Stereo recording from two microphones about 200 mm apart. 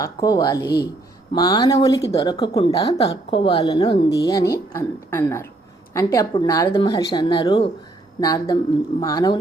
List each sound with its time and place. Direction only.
0.0 s a woman's voice: 20° left (ahead or behind)